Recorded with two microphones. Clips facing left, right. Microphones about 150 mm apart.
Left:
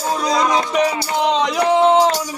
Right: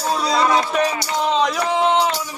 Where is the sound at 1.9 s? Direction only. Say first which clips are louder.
Left 4 dB; 45° left (ahead or behind).